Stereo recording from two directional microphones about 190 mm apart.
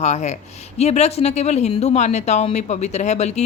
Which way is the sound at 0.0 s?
35° left (ahead or behind).